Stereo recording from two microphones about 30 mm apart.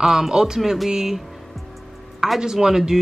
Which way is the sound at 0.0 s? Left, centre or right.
Centre.